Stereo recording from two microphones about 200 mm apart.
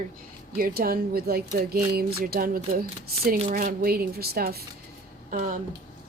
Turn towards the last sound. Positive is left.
turn(degrees=-45)  # may be behind; listen again after turning